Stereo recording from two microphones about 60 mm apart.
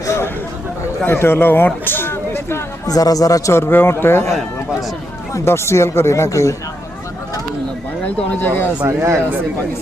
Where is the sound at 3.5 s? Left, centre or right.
Left.